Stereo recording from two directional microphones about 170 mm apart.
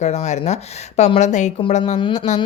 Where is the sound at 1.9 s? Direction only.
30° left (ahead or behind).